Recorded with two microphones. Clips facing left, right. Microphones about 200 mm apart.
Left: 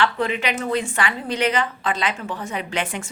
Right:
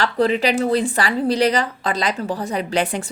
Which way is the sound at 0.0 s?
35° right (ahead or behind).